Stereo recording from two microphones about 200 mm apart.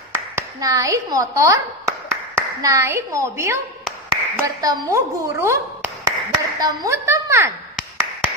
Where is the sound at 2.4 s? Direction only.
15° right (ahead or behind).